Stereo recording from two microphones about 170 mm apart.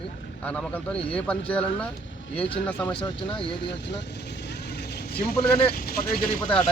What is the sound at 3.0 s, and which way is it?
Speech, 30° left (ahead or behind).